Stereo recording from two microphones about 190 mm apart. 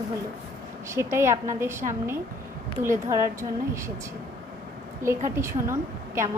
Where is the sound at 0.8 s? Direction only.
15° right (ahead or behind).